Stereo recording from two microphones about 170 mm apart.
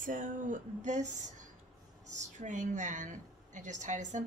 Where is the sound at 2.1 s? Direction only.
45° right (ahead or behind).